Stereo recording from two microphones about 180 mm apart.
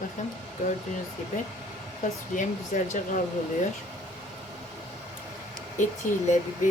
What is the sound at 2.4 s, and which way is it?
Speech, 45° left (ahead or behind).